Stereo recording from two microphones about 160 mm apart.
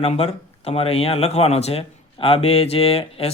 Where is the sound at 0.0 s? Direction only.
40° left (ahead or behind).